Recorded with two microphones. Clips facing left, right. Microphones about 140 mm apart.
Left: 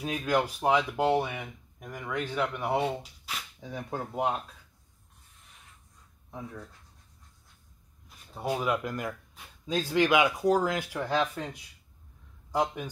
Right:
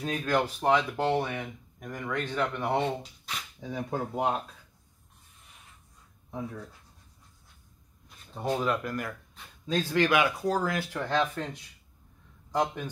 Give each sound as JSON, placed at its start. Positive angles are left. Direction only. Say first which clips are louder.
{"t": 0.0, "sound": "speech", "louder": "even", "side_deg": 10}
{"t": 8.4, "sound": "a man's voice", "louder": "right 1 dB", "side_deg": 10}